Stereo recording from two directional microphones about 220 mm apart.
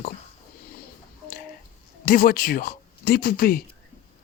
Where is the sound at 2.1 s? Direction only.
40° left (ahead or behind).